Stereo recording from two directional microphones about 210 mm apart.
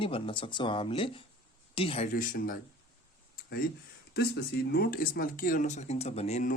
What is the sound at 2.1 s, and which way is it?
Speech, 40° left (ahead or behind).